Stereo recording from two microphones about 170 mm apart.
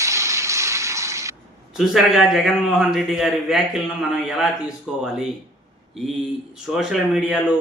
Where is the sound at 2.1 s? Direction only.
Centre (ahead or behind).